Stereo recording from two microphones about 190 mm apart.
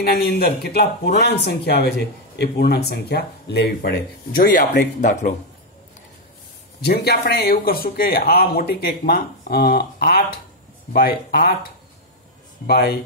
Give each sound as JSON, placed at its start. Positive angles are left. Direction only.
{"t": 0.0, "sound": "speech", "side_deg": 55}
{"t": 6.8, "sound": "speech", "side_deg": 55}
{"t": 12.6, "sound": "speech", "side_deg": 55}